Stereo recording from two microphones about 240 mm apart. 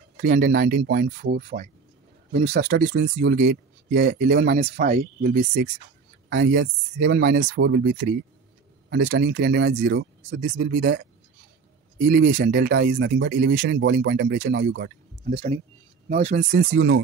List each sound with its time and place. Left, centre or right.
0.2 s speech: right
12.1 s speech: right
15.2 s speech: right